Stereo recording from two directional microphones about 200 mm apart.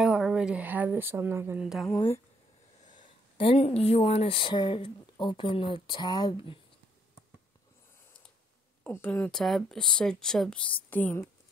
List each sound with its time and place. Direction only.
0.0 s a woman's voice: 5° right (ahead or behind)
3.3 s speech: 30° left (ahead or behind)
8.8 s speech: 10° left (ahead or behind)